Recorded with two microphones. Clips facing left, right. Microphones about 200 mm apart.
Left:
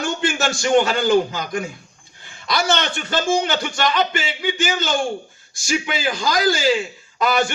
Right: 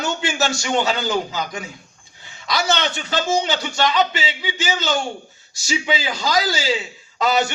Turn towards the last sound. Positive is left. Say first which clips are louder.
# even
turn(degrees=55)  # may be behind; listen again after turning